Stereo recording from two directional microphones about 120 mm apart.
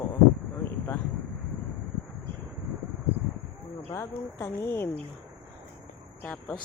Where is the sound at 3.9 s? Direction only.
20° left (ahead or behind).